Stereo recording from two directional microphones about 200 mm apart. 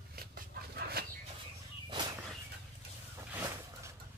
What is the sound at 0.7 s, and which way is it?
Dog, 50° right (ahead or behind).